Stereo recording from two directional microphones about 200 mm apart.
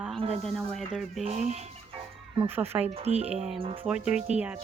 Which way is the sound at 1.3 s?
35° right (ahead or behind).